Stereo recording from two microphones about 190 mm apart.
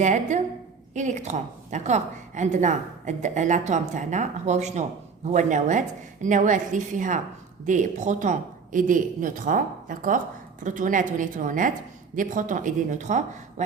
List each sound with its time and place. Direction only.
0.0 s a woman's voice: 40° right (ahead or behind)